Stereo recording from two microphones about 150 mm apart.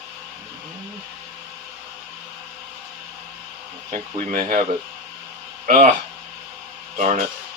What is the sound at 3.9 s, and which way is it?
Speech, 65° right (ahead or behind).